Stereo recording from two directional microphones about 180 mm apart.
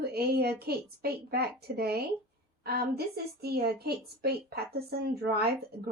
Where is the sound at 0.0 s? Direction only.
60° right (ahead or behind).